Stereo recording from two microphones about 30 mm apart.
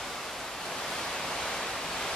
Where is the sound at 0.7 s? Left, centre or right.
Centre.